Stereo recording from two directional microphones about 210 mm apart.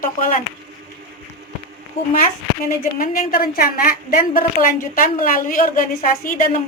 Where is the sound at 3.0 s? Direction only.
40° left (ahead or behind).